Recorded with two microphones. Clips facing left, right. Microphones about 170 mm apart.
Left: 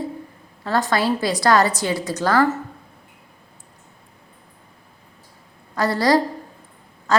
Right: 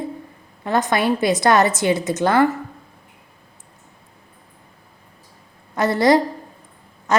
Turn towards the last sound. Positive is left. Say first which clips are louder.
# even
turn(degrees=-20)  # may be behind; listen again after turning